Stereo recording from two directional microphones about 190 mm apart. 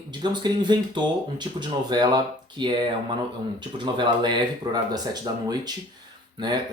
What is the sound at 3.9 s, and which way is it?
Speech, 25° right (ahead or behind).